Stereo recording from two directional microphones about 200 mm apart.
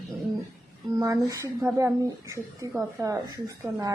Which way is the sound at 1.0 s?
15° right (ahead or behind).